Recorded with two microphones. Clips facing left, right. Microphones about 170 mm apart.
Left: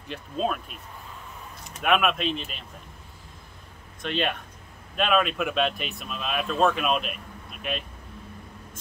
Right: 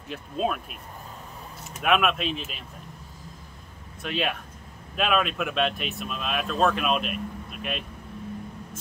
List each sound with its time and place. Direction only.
0.1 s speech: 5° right (ahead or behind)
4.0 s speech: 5° right (ahead or behind)